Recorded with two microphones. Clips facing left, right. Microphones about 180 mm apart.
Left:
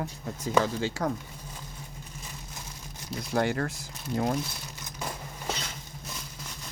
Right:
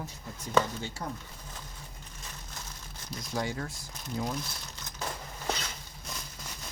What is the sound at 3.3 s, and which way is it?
Speech, 65° left (ahead or behind).